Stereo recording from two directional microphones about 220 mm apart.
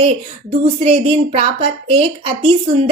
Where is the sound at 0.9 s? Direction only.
25° right (ahead or behind).